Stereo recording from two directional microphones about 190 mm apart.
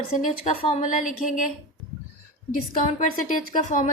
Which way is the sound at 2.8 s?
45° left (ahead or behind).